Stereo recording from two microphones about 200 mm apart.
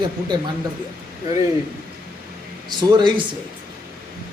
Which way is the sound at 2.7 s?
20° right (ahead or behind).